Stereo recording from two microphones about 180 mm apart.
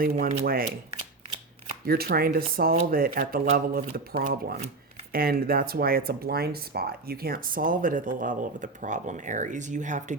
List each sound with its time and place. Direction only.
0.0 s speech: 55° right (ahead or behind)
1.9 s speech: 55° right (ahead or behind)